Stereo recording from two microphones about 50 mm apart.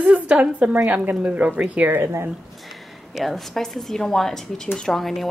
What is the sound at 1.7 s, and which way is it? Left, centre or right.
Speech, right.